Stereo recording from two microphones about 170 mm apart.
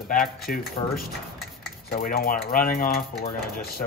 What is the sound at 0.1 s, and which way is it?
Speech, 55° left (ahead or behind).